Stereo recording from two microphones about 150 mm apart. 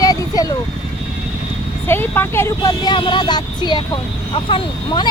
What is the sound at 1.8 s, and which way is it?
Speech, 15° left (ahead or behind).